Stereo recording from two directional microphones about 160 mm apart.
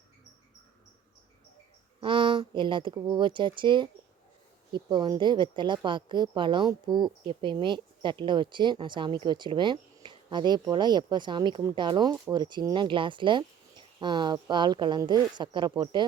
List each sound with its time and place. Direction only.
2.0 s a woman's voice: 30° right (ahead or behind)